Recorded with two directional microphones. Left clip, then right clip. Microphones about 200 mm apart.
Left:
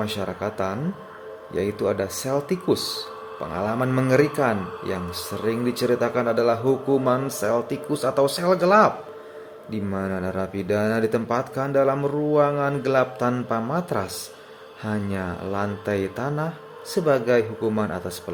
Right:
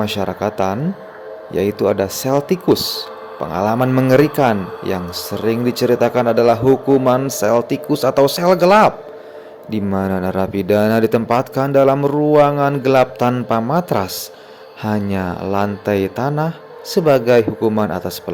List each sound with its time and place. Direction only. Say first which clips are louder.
0.0 s speech: right 8 dB; 35° right (ahead or behind)